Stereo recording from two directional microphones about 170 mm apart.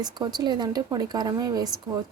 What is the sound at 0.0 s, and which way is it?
Speech, 25° right (ahead or behind).